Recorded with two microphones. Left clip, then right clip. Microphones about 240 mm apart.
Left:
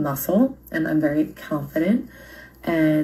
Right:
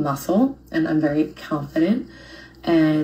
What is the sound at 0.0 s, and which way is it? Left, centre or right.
Speech, left.